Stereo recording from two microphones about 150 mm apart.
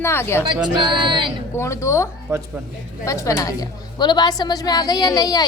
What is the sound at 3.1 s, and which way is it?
A woman's voice, 20° left (ahead or behind).